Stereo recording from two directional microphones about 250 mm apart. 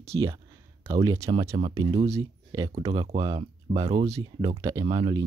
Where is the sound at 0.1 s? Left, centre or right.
Centre.